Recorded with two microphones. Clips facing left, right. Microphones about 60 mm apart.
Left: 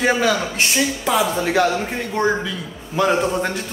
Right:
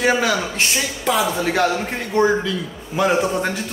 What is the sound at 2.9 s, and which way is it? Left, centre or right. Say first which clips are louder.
Speech: even; centre.